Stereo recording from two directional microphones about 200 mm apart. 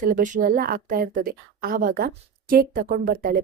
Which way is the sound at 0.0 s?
40° right (ahead or behind).